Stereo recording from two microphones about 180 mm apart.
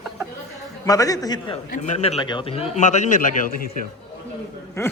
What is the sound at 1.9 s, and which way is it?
A man's voice, 35° left (ahead or behind).